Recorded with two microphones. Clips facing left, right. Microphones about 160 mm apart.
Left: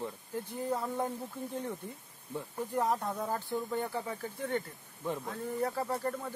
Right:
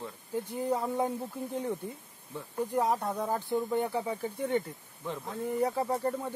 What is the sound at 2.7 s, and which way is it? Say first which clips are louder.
Speech: right 2 dB; 10° right (ahead or behind).